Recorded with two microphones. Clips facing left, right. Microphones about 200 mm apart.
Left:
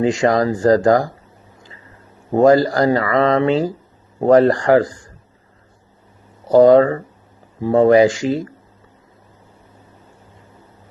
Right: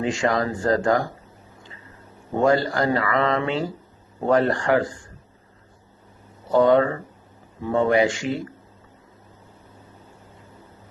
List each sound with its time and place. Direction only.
0.0 s speech: 35° left (ahead or behind)
2.3 s speech: 35° left (ahead or behind)
6.5 s speech: 35° left (ahead or behind)